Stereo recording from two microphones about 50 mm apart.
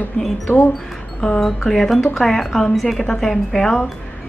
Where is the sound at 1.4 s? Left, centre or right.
Centre.